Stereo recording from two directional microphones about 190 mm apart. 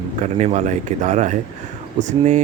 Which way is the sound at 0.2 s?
35° right (ahead or behind).